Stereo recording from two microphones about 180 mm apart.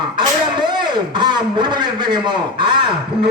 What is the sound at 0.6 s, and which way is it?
A man's voice, 25° right (ahead or behind).